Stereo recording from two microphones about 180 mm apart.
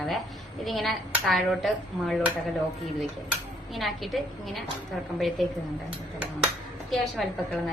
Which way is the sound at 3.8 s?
Centre (ahead or behind).